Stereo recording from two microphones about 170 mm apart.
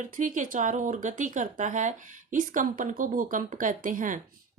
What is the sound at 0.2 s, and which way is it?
Speech, 50° right (ahead or behind).